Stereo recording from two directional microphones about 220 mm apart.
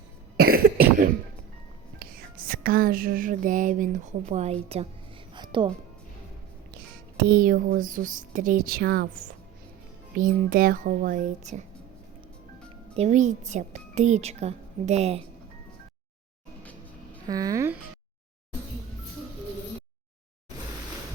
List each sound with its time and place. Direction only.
0.3 s cough: 45° right (ahead or behind)
2.0 s music: 40° right (ahead or behind)
4.7 s a woman's voice: 30° right (ahead or behind)
5.3 s music: 20° right (ahead or behind)
7.2 s speech: 40° right (ahead or behind)
13.0 s speech: 30° right (ahead or behind)
17.2 s speech: 15° right (ahead or behind)